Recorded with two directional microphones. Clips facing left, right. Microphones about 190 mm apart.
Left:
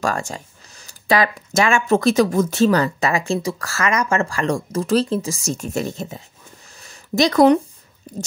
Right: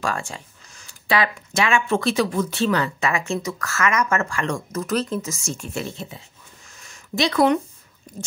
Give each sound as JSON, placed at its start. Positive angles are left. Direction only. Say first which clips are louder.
{"t": 0.0, "sound": "speech", "louder": "left 4 dB", "side_deg": 40}
{"t": 6.8, "sound": "a sound", "louder": "left 5 dB", "side_deg": 40}
{"t": 8.1, "sound": "speech", "louder": "left 6 dB", "side_deg": 35}